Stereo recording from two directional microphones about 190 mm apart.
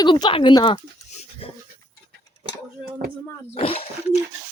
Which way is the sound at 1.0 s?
35° left (ahead or behind).